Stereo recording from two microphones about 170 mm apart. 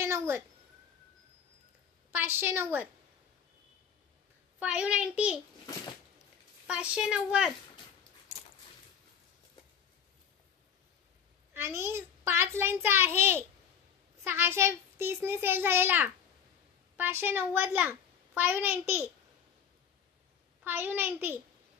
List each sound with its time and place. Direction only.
0.0 s a sound: 15° right (ahead or behind)
2.0 s a child's voice: 15° right (ahead or behind)
4.6 s a child's voice: 5° right (ahead or behind)
6.7 s a child's voice: 5° right (ahead or behind)
11.5 s a child's voice: 15° right (ahead or behind)
20.6 s a child's voice: 10° right (ahead or behind)